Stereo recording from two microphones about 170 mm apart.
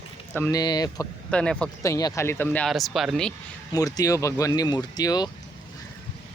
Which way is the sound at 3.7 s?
20° left (ahead or behind).